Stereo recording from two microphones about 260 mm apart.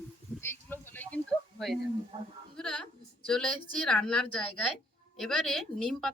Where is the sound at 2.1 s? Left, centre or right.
Right.